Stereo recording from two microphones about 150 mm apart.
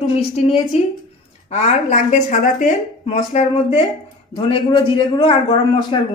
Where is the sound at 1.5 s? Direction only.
50° left (ahead or behind).